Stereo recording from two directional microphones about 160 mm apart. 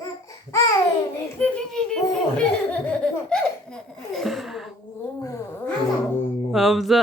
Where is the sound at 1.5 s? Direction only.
5° left (ahead or behind).